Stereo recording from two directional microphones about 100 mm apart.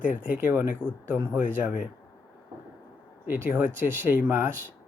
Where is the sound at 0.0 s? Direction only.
15° right (ahead or behind).